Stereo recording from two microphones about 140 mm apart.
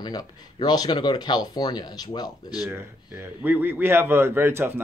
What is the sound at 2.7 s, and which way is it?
A man's voice, 15° right (ahead or behind).